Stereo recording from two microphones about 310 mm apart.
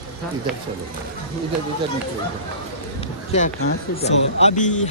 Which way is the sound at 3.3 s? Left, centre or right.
Left.